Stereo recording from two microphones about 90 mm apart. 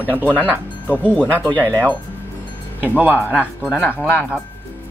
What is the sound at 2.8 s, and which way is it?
Speech, 20° right (ahead or behind).